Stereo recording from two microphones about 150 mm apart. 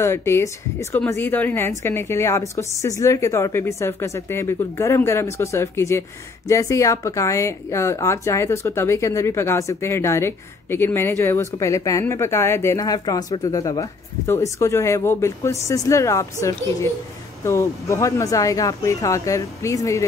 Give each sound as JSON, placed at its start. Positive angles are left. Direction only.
{"t": 0.0, "sound": "a woman's voice", "side_deg": 20}